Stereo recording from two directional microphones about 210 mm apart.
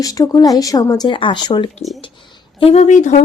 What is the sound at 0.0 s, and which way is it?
Speech, 15° left (ahead or behind).